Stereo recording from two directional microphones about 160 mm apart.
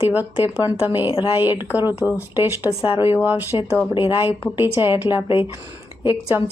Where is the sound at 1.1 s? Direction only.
30° left (ahead or behind).